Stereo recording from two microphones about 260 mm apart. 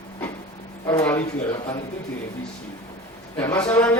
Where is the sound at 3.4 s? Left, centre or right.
Centre.